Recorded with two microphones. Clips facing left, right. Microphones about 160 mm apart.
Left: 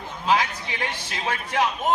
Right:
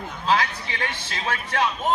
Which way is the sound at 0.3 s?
15° left (ahead or behind).